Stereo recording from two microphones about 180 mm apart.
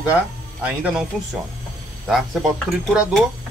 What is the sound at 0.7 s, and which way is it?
Speech, 5° right (ahead or behind).